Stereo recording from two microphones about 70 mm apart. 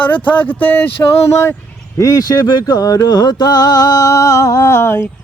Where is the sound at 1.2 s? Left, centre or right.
Left.